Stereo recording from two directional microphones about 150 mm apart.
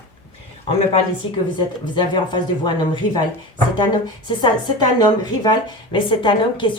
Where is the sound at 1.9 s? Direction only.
30° left (ahead or behind).